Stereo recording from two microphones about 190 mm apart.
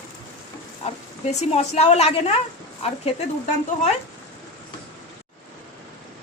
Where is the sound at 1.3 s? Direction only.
35° left (ahead or behind).